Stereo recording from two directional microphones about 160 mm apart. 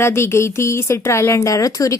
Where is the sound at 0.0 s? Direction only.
15° left (ahead or behind).